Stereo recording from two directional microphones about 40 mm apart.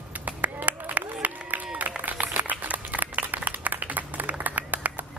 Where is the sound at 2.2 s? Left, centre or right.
Right.